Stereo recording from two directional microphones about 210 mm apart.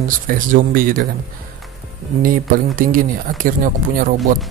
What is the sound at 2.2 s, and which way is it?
Speech, 40° right (ahead or behind).